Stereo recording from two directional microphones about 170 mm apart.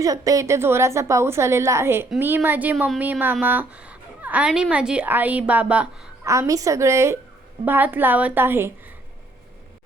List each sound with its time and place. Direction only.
0.0 s a woman's voice: 20° right (ahead or behind)
6.3 s a woman's voice: 20° right (ahead or behind)